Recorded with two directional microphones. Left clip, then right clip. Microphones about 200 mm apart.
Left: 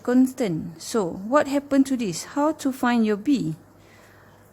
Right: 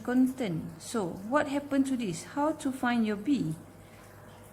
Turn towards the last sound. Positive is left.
turn(degrees=45)  # may be behind; listen again after turning